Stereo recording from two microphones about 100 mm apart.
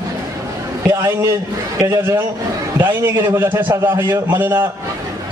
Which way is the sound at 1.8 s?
30° right (ahead or behind).